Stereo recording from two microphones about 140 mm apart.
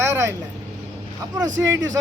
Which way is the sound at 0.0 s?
20° right (ahead or behind).